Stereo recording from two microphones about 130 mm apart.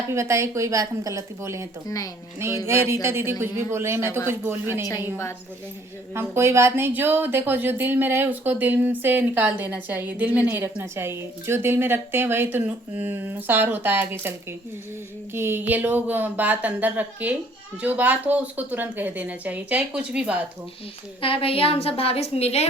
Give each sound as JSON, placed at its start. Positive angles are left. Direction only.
{"t": 0.1, "sound": "a woman's voice", "side_deg": -20}
{"t": 2.6, "sound": "a woman's voice", "side_deg": -20}
{"t": 6.1, "sound": "speech", "side_deg": -20}
{"t": 21.2, "sound": "a woman's voice", "side_deg": 45}